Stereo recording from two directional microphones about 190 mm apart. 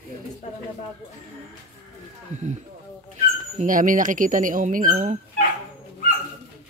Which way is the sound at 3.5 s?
45° right (ahead or behind).